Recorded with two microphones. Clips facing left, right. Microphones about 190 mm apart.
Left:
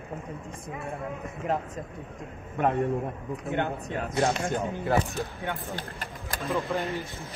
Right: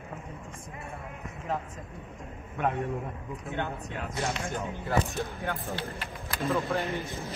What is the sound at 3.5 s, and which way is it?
Speech, 55° left (ahead or behind).